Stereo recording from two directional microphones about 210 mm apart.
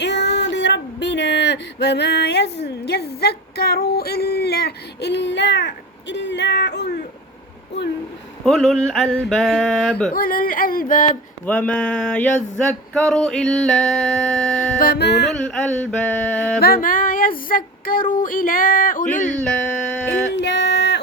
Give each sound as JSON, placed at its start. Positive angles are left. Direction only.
{"t": 0.0, "sound": "a sound", "side_deg": 55}
{"t": 8.4, "sound": "male singing", "side_deg": 0}
{"t": 10.1, "sound": "a sound", "side_deg": 45}
{"t": 11.4, "sound": "male singing", "side_deg": 5}
{"t": 14.8, "sound": "a sound", "side_deg": 45}
{"t": 15.3, "sound": "male singing", "side_deg": 5}
{"t": 16.6, "sound": "female singing", "side_deg": 45}
{"t": 19.5, "sound": "male singing", "side_deg": 5}
{"t": 20.1, "sound": "female singing", "side_deg": 55}